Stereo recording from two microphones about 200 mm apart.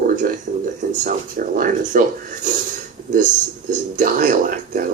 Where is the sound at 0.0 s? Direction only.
45° right (ahead or behind).